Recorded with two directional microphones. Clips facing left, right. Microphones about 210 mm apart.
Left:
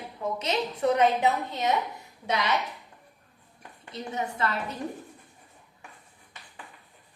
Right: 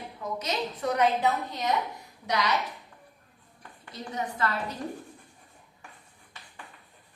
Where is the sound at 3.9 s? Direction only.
25° left (ahead or behind).